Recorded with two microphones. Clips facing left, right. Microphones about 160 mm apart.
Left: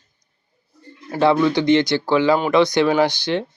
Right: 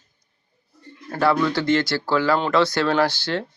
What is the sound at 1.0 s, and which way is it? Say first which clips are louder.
Speech: left 4 dB; 20° left (ahead or behind).